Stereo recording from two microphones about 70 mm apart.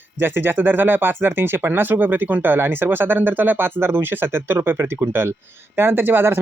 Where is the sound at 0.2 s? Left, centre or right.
Right.